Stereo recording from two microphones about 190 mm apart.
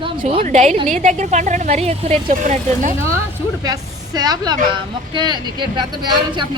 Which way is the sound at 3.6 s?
20° right (ahead or behind).